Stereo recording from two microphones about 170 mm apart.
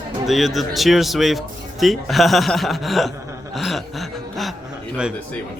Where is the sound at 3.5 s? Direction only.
Centre (ahead or behind).